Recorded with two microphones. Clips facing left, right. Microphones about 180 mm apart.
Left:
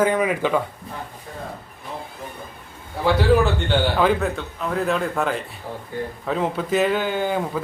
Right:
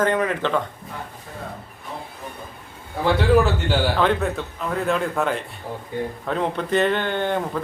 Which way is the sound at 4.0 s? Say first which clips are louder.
Left 1 dB; centre (ahead or behind).